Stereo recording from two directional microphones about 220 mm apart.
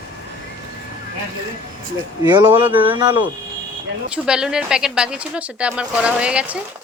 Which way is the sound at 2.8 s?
20° right (ahead or behind).